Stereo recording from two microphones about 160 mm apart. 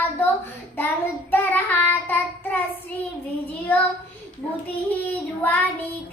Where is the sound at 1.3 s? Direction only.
10° left (ahead or behind).